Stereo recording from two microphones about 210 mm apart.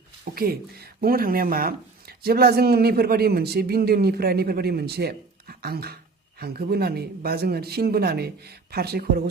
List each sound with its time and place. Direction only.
0.3 s speech: 45° right (ahead or behind)